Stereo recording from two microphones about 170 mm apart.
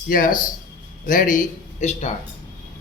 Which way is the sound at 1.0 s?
50° left (ahead or behind).